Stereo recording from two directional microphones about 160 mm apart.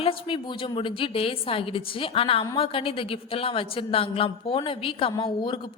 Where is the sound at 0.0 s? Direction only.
35° left (ahead or behind).